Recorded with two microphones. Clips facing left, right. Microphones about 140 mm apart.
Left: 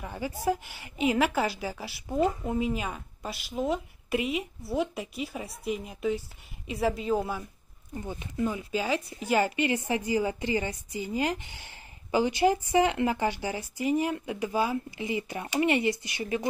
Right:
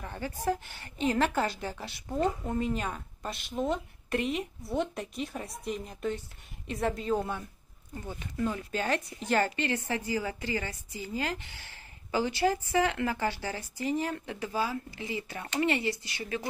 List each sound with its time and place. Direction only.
0.0 s a woman's voice: 10° left (ahead or behind)
7.9 s speech: 15° left (ahead or behind)